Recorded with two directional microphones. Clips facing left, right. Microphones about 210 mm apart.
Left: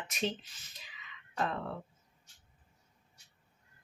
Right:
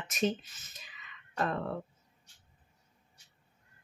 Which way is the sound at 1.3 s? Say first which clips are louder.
Right 2 dB; 50° right (ahead or behind).